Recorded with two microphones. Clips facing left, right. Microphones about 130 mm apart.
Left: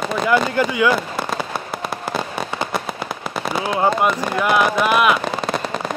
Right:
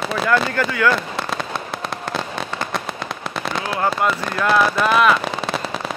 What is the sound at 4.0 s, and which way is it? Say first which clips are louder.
Speech: left 2 dB; 15° left (ahead or behind).